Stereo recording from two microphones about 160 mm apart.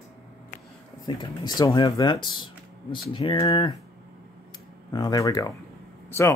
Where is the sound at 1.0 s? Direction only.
25° left (ahead or behind).